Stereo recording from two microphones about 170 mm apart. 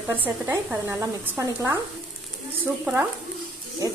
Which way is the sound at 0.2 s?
10° right (ahead or behind).